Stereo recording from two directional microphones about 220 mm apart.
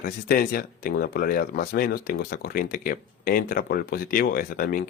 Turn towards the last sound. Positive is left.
turn(degrees=40)  # may be behind; listen again after turning